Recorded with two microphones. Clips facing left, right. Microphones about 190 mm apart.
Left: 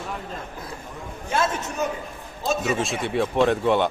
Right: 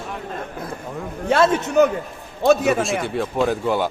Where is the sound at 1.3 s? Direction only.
65° right (ahead or behind).